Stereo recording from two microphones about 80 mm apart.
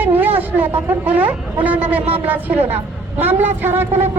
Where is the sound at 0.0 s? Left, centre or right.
Right.